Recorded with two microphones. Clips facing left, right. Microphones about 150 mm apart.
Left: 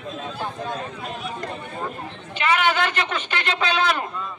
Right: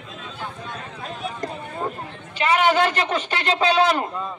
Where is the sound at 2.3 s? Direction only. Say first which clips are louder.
Right 3 dB; 35° right (ahead or behind).